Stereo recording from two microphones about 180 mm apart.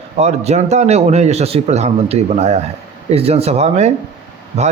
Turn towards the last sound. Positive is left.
turn(degrees=-35)  # may be behind; listen again after turning